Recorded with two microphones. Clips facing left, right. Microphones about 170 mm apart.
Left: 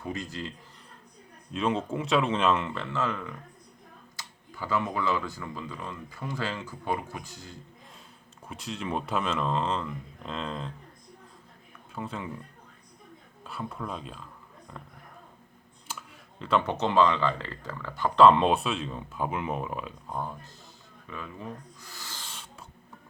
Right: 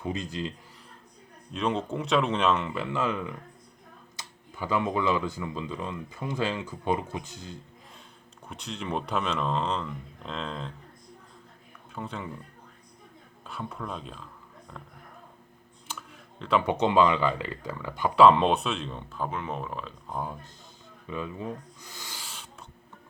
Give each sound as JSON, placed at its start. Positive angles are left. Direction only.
{"t": 0.0, "sound": "speech", "side_deg": -20}
{"t": 1.5, "sound": "speech", "side_deg": 0}
{"t": 2.7, "sound": "speech", "side_deg": -10}
{"t": 8.4, "sound": "speech", "side_deg": 0}
{"t": 11.9, "sound": "speech", "side_deg": 0}
{"t": 13.4, "sound": "speech", "side_deg": 0}
{"t": 15.9, "sound": "a sound", "side_deg": 0}
{"t": 16.6, "sound": "speech", "side_deg": -15}
{"t": 18.2, "sound": "speech", "side_deg": 0}
{"t": 20.1, "sound": "speech", "side_deg": -5}
{"t": 21.1, "sound": "speech", "side_deg": -15}
{"t": 22.2, "sound": "owl", "side_deg": 0}